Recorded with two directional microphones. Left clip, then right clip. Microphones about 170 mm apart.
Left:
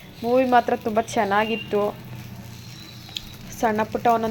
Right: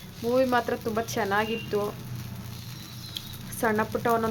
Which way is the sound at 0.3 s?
10° left (ahead or behind).